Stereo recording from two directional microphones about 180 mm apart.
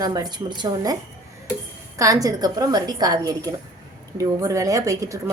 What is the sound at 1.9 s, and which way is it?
A woman's voice, 20° right (ahead or behind).